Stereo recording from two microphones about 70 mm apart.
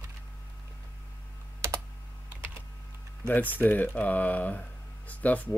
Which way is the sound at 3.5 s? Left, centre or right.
Left.